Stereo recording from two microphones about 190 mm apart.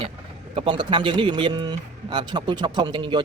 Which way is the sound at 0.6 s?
25° right (ahead or behind).